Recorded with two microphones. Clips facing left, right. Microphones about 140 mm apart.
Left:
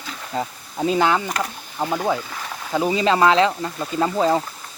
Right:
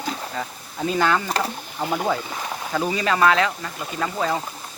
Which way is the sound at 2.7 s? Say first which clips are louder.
Left 4 dB; 20° left (ahead or behind).